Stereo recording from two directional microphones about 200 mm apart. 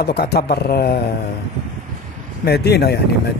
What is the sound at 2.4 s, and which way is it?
Speech, 55° left (ahead or behind).